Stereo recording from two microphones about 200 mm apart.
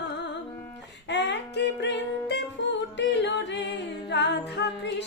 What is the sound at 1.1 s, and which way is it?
Music, 60° left (ahead or behind).